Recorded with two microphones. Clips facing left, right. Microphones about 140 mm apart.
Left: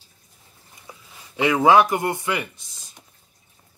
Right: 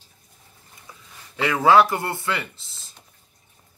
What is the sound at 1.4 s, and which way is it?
Speech, 20° left (ahead or behind).